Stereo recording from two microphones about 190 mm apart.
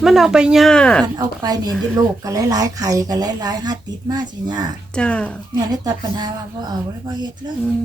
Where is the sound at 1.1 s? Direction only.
20° right (ahead or behind).